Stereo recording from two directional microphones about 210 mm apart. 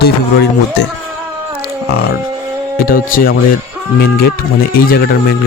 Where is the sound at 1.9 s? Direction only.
50° left (ahead or behind).